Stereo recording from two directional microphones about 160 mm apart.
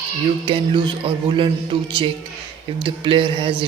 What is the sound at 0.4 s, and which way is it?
Speech, 30° right (ahead or behind).